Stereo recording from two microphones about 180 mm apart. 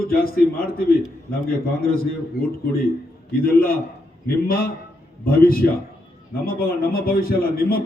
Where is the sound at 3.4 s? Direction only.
55° left (ahead or behind).